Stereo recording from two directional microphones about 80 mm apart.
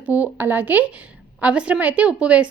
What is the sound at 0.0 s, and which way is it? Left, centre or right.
A woman's voice, centre.